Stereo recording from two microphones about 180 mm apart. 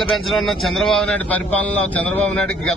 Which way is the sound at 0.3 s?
Centre (ahead or behind).